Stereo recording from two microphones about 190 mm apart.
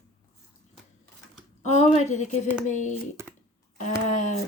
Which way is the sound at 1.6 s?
35° left (ahead or behind).